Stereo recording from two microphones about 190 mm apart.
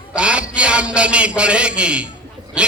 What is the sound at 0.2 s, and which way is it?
A man's voice, 5° right (ahead or behind).